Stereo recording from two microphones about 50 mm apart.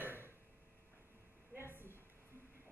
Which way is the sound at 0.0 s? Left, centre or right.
Right.